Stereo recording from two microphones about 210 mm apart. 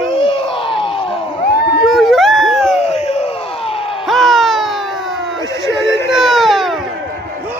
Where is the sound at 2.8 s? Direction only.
30° left (ahead or behind).